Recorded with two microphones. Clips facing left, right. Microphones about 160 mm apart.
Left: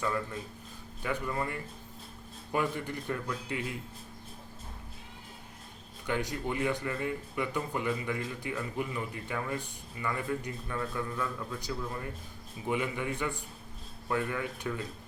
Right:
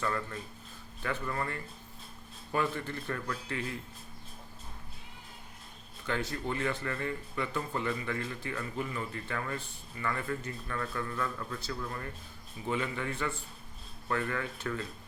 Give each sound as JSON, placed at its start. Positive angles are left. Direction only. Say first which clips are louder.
{"t": 0.0, "sound": "speech", "louder": "left 1 dB", "side_deg": 10}
{"t": 6.1, "sound": "speech", "louder": "left 1 dB", "side_deg": 15}